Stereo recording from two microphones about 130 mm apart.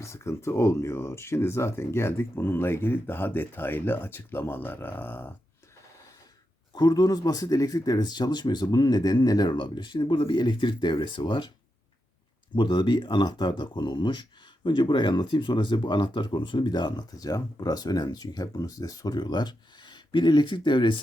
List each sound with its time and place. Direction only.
0.0 s speech: 20° left (ahead or behind)
6.7 s speech: 30° left (ahead or behind)
12.5 s speech: 35° left (ahead or behind)